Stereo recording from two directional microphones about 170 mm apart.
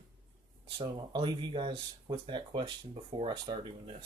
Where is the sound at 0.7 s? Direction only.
25° right (ahead or behind).